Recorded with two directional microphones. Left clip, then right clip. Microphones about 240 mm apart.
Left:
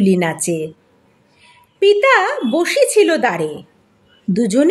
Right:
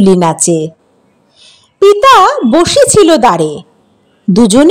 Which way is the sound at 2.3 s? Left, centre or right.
Right.